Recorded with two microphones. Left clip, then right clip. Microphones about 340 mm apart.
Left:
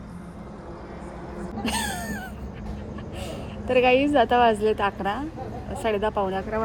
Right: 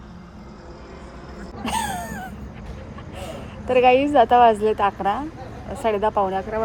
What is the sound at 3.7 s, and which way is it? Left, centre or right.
Speech, centre.